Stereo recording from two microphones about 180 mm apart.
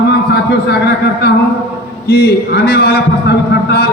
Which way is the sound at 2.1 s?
60° left (ahead or behind).